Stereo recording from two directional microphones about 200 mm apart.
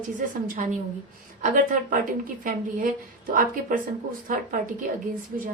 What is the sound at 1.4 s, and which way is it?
A woman's voice, 40° right (ahead or behind).